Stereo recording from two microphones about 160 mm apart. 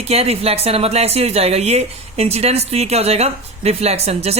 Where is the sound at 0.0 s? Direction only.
40° right (ahead or behind).